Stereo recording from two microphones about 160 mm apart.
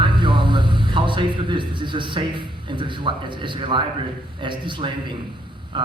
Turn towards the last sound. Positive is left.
turn(degrees=-30)  # may be behind; listen again after turning